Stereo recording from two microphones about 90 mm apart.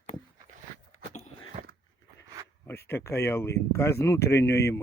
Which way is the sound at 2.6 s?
25° left (ahead or behind).